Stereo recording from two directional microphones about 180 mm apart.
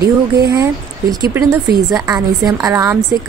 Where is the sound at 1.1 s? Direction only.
20° right (ahead or behind).